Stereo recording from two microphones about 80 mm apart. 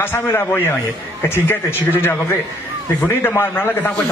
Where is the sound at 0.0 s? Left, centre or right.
Left.